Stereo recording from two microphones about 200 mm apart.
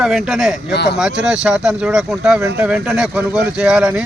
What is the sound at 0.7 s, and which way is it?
Speech, 55° left (ahead or behind).